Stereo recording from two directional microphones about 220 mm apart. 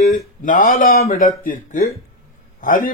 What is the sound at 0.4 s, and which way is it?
Speech, 35° left (ahead or behind).